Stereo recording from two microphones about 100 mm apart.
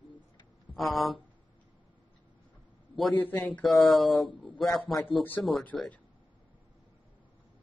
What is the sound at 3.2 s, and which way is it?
Speech, 15° left (ahead or behind).